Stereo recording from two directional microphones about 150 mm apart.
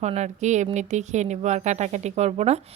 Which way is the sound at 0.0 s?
50° right (ahead or behind).